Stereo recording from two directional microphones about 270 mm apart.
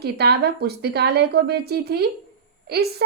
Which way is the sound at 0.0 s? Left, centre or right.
Right.